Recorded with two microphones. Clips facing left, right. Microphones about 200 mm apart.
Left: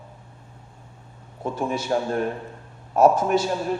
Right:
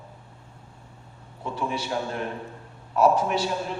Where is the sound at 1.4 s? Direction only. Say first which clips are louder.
Left 4 dB; 45° left (ahead or behind).